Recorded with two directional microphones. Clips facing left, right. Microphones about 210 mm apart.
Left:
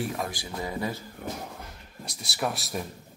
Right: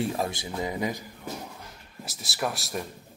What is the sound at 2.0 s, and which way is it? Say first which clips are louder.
Speech: even; centre (ahead or behind).